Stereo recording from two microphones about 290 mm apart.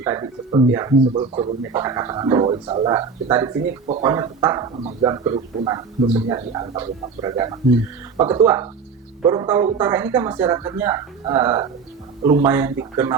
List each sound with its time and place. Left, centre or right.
0.0 s a man's voice: centre